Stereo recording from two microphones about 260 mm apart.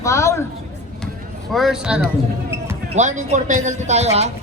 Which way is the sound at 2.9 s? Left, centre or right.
Right.